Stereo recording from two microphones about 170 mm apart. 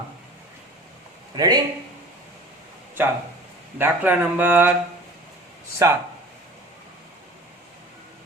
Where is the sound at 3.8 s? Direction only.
10° right (ahead or behind).